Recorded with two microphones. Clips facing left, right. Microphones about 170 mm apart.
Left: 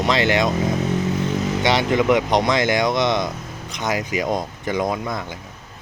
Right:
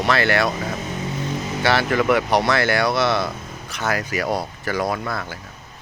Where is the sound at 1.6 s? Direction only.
15° left (ahead or behind).